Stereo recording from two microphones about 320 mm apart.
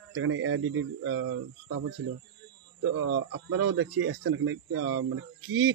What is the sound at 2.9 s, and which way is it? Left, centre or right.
Speech, right.